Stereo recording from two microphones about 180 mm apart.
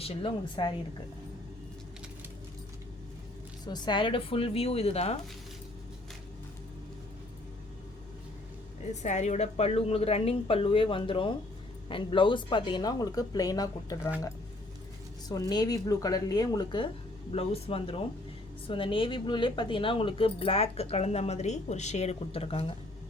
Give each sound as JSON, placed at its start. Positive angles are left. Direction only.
{"t": 0.0, "sound": "speech", "side_deg": 30}
{"t": 3.7, "sound": "speech", "side_deg": 25}
{"t": 8.9, "sound": "speech", "side_deg": 40}
{"t": 15.3, "sound": "speech", "side_deg": 20}